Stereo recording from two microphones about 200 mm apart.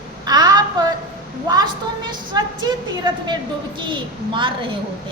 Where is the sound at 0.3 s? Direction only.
20° right (ahead or behind).